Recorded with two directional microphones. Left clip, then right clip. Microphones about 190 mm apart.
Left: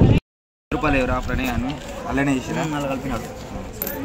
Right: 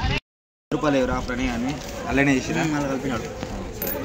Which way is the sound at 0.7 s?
5° left (ahead or behind).